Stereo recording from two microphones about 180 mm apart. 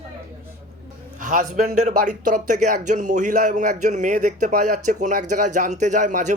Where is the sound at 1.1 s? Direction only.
45° right (ahead or behind).